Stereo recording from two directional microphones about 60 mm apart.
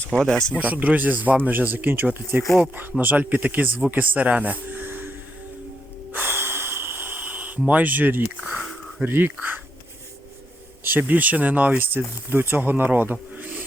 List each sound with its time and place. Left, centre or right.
0.2 s speech: centre
0.6 s speech: right
6.1 s snort: right
7.7 s speech: right
8.4 s a sound: centre
9.0 s speech: right
10.8 s speech: right